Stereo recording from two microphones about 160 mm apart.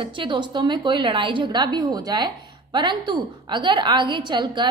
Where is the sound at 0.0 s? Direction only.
30° right (ahead or behind).